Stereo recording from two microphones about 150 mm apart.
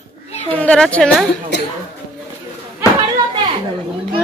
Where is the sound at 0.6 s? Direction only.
10° left (ahead or behind).